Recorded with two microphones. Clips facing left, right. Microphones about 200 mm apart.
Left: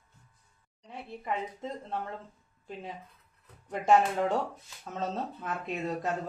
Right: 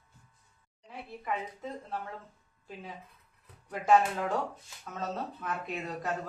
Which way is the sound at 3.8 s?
25° left (ahead or behind).